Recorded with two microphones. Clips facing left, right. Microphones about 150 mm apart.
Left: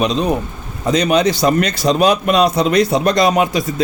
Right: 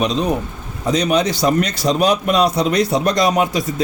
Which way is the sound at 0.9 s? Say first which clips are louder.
Left 3 dB; 85° left.